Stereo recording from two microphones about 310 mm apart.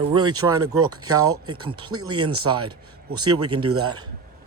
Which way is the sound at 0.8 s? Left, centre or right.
Right.